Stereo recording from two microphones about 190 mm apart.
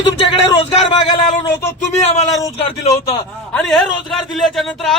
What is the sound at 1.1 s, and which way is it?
Speech, 40° left (ahead or behind).